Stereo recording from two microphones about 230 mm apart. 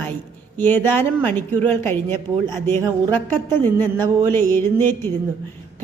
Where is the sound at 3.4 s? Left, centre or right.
Centre.